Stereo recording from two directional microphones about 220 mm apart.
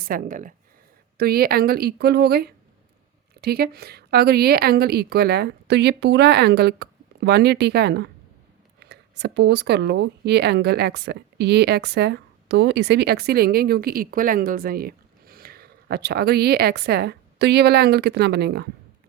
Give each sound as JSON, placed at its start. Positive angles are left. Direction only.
{"t": 0.1, "sound": "speech", "side_deg": -35}